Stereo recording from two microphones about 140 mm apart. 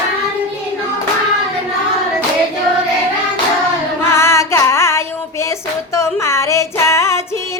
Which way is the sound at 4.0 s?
20° left (ahead or behind).